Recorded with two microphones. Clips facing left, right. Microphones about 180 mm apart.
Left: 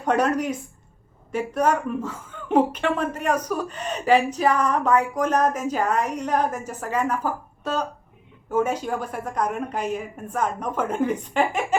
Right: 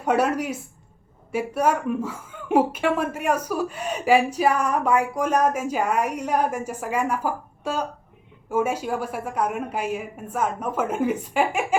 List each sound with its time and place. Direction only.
0.0 s a woman's voice: 10° right (ahead or behind)